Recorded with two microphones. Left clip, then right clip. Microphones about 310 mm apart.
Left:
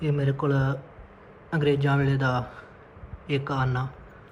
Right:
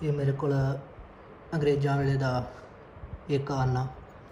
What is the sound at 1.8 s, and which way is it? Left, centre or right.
Speech, centre.